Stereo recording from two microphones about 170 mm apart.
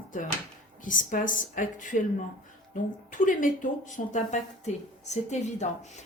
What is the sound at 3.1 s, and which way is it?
A woman's voice, 50° left (ahead or behind).